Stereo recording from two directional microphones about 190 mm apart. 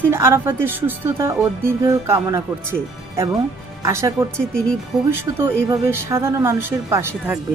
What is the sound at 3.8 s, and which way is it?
A woman's voice, 15° right (ahead or behind).